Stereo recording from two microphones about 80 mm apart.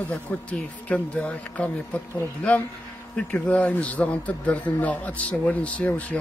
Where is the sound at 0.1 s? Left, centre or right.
Centre.